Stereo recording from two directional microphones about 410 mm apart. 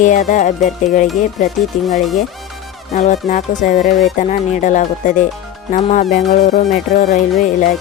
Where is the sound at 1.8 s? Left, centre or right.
Centre.